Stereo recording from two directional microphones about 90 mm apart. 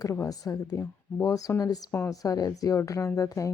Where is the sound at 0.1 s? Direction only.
40° left (ahead or behind).